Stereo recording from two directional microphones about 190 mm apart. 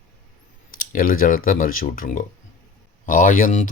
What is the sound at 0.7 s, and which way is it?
Speech, 50° left (ahead or behind).